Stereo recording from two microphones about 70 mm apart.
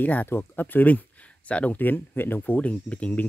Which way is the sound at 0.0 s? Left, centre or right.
Left.